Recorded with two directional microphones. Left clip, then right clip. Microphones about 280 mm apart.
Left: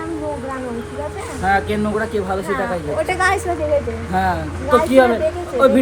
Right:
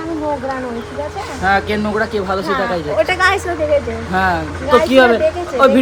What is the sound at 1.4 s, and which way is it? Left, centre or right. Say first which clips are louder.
A woman's voice: right 2 dB; centre.